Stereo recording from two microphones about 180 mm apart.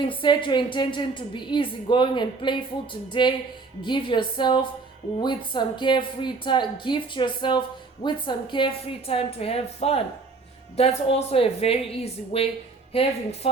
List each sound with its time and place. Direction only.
0.0 s a woman's voice: 25° left (ahead or behind)